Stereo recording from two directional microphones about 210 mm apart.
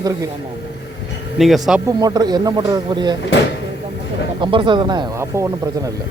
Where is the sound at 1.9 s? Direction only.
20° right (ahead or behind).